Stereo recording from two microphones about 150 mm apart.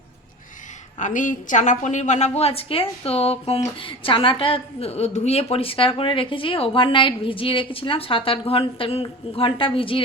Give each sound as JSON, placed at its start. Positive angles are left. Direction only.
{"t": 0.9, "sound": "a woman's voice", "side_deg": 55}